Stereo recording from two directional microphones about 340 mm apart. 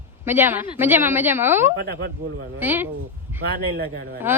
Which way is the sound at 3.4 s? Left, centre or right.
Right.